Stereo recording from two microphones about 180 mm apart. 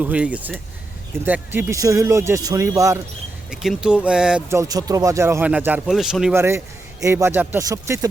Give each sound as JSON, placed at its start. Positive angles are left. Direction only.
{"t": 0.0, "sound": "speech", "side_deg": -5}
{"t": 3.5, "sound": "speech", "side_deg": -5}
{"t": 4.4, "sound": "speech", "side_deg": -15}